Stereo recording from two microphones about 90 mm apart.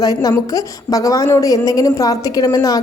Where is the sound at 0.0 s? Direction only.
40° left (ahead or behind).